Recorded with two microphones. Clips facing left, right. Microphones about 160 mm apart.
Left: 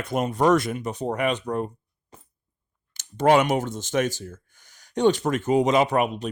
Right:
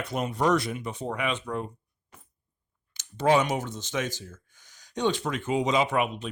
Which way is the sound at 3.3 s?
60° left (ahead or behind).